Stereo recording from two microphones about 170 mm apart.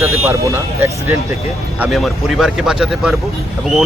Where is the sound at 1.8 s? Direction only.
Centre (ahead or behind).